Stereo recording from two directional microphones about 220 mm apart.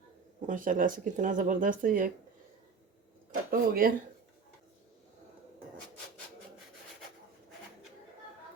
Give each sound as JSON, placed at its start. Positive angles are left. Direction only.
{"t": 0.4, "sound": "speech", "side_deg": -35}
{"t": 3.5, "sound": "speech", "side_deg": -40}